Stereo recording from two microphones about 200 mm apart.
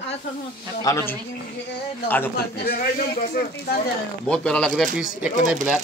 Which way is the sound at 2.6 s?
50° left (ahead or behind).